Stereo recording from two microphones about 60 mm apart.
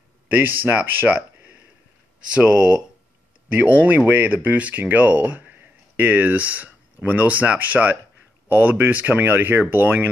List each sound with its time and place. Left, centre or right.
0.3 s speech: right
2.3 s speech: centre
3.5 s speech: right